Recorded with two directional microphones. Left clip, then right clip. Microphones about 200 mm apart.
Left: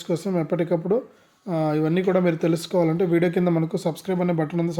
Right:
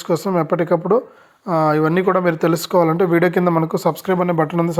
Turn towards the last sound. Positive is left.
turn(degrees=0)  # may be behind; listen again after turning